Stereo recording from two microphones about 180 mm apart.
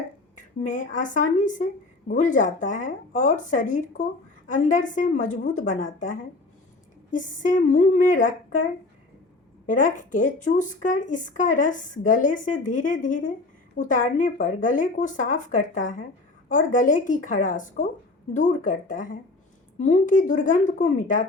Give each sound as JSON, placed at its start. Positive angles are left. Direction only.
{"t": 0.3, "sound": "speech", "side_deg": 45}
{"t": 9.6, "sound": "speech", "side_deg": 45}